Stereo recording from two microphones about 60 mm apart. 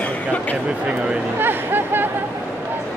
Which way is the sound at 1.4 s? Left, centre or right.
Right.